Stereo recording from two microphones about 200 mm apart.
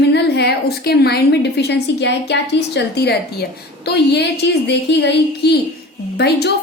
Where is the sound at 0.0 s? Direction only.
55° left (ahead or behind).